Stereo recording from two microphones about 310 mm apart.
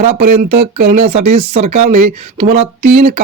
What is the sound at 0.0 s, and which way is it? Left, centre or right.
Speech, right.